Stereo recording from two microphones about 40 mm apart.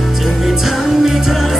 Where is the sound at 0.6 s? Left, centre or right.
Centre.